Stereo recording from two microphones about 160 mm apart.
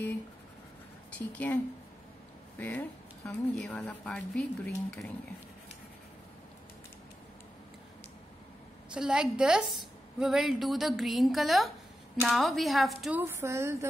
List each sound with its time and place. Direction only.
1.1 s speech: 10° left (ahead or behind)
3.3 s speech: 5° left (ahead or behind)
8.9 s a woman's voice: 5° right (ahead or behind)
13.2 s speech: 15° right (ahead or behind)